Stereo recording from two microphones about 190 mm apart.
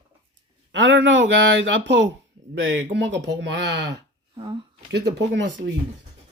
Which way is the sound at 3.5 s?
65° right (ahead or behind).